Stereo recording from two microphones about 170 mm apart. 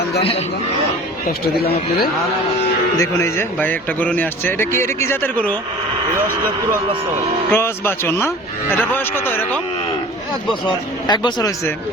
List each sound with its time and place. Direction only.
3.0 s a man's voice: 15° left (ahead or behind)
7.5 s a man's voice: 15° left (ahead or behind)
10.7 s speech: 25° left (ahead or behind)